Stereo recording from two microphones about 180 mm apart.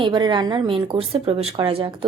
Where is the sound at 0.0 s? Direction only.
25° right (ahead or behind).